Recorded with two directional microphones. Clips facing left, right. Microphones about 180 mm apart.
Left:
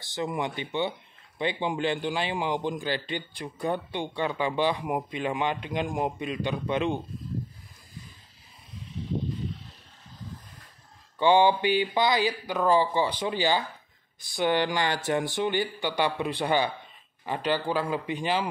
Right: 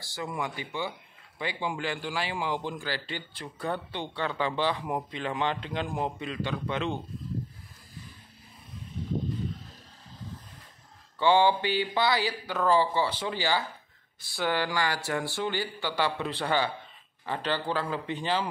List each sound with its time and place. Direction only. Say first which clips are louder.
0.0 s a man's voice: left 4 dB; 20° left (ahead or behind)
11.1 s a man's voice: left 2 dB; 15° left (ahead or behind)